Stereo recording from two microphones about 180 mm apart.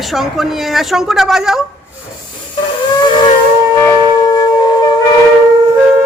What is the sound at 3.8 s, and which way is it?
Wind instrument, 20° left (ahead or behind).